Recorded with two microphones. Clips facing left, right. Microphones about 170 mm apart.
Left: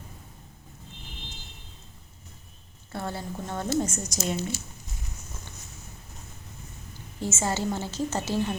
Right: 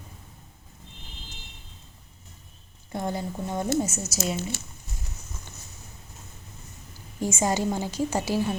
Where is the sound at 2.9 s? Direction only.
15° right (ahead or behind).